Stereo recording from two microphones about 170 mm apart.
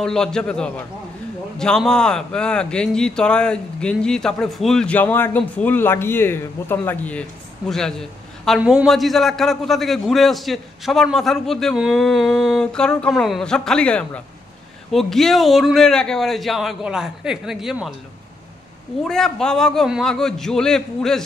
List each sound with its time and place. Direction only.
0.0 s speech: 5° left (ahead or behind)
19.0 s speech: 5° left (ahead or behind)